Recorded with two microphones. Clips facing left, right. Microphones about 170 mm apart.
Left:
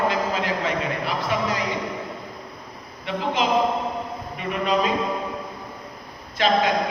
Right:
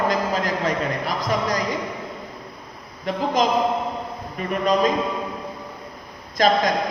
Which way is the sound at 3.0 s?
40° right (ahead or behind).